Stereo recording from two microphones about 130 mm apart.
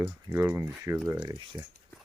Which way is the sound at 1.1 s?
30° right (ahead or behind).